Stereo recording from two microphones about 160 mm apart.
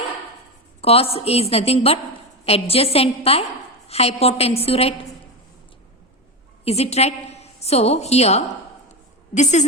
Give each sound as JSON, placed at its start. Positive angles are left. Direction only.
{"t": 0.8, "sound": "a woman's voice", "side_deg": 40}
{"t": 6.7, "sound": "a woman's voice", "side_deg": 40}